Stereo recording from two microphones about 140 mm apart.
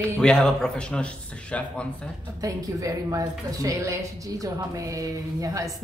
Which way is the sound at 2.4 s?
25° right (ahead or behind).